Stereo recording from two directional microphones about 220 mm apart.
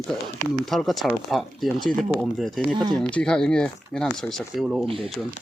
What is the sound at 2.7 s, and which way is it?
Speech, 20° right (ahead or behind).